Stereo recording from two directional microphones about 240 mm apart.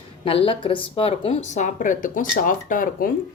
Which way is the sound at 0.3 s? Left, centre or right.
Left.